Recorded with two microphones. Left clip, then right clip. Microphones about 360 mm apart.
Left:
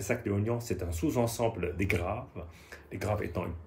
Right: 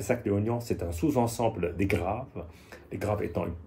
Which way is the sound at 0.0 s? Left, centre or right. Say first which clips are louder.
Right 4 dB; centre.